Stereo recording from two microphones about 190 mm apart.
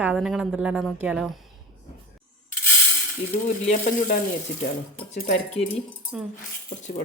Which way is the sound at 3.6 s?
40° left (ahead or behind).